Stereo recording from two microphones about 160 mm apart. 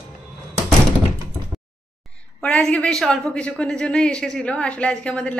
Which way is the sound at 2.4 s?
10° left (ahead or behind).